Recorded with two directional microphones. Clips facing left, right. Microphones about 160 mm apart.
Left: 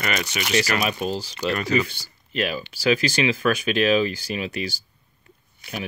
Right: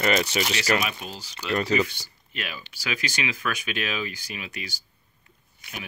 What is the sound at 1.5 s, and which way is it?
Speech, 30° right (ahead or behind).